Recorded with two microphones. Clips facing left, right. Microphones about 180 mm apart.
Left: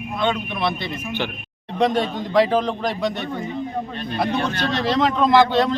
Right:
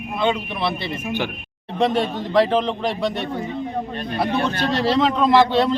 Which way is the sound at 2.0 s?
Centre (ahead or behind).